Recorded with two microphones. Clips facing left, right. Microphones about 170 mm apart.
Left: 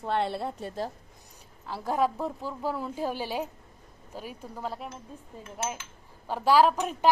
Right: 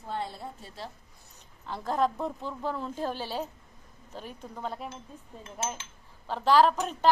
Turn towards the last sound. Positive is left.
turn(degrees=10)  # may be behind; listen again after turning